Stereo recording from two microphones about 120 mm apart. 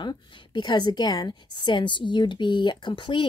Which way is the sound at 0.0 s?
40° left (ahead or behind).